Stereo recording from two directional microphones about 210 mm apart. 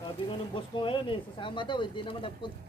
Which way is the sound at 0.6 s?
25° left (ahead or behind).